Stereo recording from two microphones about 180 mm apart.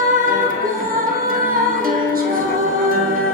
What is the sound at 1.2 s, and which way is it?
Music, 50° right (ahead or behind).